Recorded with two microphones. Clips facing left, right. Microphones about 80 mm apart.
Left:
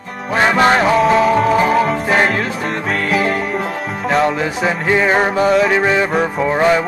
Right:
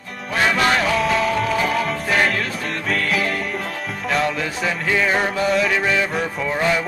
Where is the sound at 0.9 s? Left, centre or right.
Left.